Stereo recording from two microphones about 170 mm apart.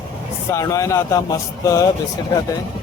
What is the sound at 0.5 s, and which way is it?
Speech, 20° left (ahead or behind).